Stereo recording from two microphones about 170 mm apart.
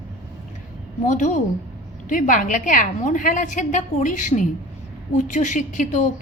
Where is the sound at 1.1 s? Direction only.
45° left (ahead or behind).